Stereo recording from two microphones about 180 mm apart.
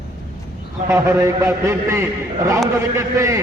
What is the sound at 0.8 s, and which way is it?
A man's voice, 15° right (ahead or behind).